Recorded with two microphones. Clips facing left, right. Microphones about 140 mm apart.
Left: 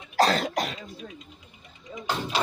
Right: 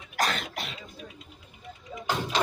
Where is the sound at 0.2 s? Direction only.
35° left (ahead or behind).